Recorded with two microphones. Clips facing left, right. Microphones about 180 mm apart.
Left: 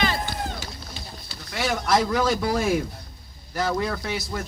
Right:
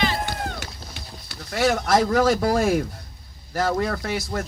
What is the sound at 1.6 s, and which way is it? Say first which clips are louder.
Speech: right 3 dB; 45° right (ahead or behind).